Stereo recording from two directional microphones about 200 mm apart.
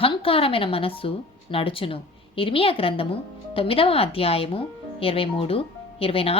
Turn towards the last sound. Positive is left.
turn(degrees=30)  # may be behind; listen again after turning